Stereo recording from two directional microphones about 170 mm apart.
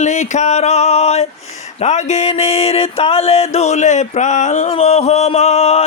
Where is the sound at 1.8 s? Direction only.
40° left (ahead or behind).